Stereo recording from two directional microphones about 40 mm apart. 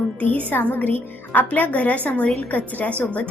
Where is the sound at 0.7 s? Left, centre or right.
Left.